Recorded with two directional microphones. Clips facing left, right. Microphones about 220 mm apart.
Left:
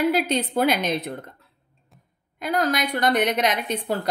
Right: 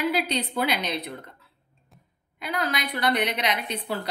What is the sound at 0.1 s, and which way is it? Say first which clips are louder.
A woman's voice: left 4 dB; 50° left (ahead or behind).